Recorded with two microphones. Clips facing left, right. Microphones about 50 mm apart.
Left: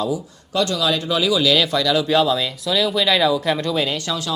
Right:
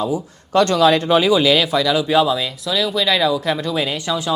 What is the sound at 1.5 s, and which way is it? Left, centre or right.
Speech, centre.